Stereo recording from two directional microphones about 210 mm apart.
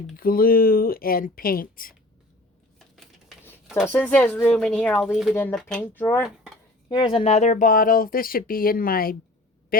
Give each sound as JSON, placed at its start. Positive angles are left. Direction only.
{"t": 0.2, "sound": "speech", "side_deg": 45}
{"t": 2.7, "sound": "a sound", "side_deg": 0}
{"t": 3.8, "sound": "speech", "side_deg": 10}
{"t": 5.3, "sound": "speech", "side_deg": 10}
{"t": 6.8, "sound": "speech", "side_deg": 25}